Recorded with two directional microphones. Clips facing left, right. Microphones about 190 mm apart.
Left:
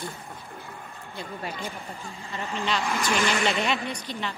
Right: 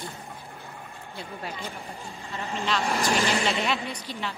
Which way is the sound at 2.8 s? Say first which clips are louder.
Right 2 dB; 35° right (ahead or behind).